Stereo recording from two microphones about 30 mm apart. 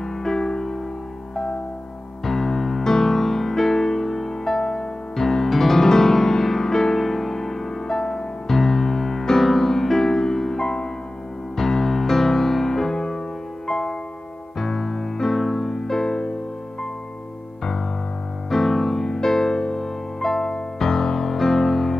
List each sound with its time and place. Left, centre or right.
0.0 s music: centre
2.2 s music: centre
18.5 s music: centre